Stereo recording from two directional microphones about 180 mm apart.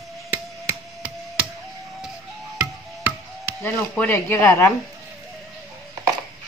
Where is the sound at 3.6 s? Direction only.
10° left (ahead or behind).